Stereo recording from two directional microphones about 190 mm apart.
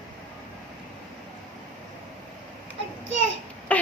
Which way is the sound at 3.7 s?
5° left (ahead or behind).